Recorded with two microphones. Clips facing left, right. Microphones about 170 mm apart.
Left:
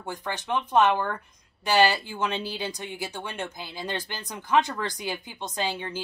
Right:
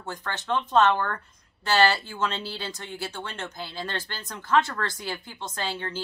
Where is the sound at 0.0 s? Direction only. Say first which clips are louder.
Left 1 dB; 15° left (ahead or behind).